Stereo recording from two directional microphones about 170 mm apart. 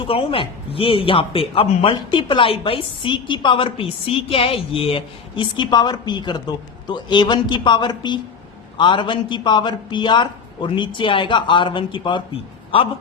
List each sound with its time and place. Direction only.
0.1 s a man's voice: 30° left (ahead or behind)